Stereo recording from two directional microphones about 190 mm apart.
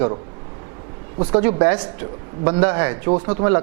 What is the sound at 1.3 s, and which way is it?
Speech, 15° right (ahead or behind).